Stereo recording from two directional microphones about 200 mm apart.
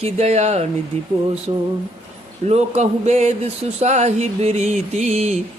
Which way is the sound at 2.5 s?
35° right (ahead or behind).